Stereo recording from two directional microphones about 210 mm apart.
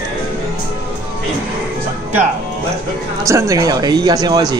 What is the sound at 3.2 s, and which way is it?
Speech, 15° right (ahead or behind).